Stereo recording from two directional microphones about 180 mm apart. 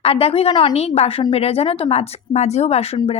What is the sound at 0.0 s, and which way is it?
A woman's voice, 35° left (ahead or behind).